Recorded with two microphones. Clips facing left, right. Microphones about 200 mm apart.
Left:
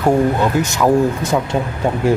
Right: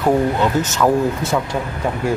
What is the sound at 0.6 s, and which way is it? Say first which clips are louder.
Speech: left 2 dB; 15° left (ahead or behind).